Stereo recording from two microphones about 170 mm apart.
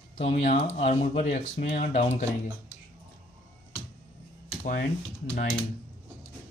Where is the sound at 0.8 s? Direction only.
35° left (ahead or behind); by 2.1 s 55° left (ahead or behind).